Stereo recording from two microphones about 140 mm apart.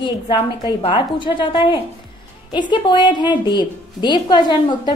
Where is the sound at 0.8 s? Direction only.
35° left (ahead or behind).